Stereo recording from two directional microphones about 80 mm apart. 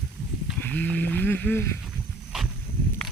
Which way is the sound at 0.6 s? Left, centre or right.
Left.